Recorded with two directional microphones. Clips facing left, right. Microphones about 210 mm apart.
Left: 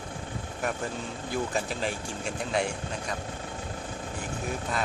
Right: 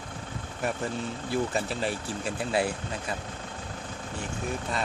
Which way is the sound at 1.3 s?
Centre (ahead or behind).